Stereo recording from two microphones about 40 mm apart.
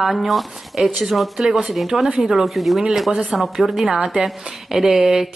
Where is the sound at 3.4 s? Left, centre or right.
Centre.